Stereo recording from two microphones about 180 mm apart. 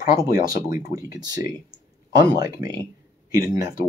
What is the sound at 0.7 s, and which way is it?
Speech, 50° left (ahead or behind).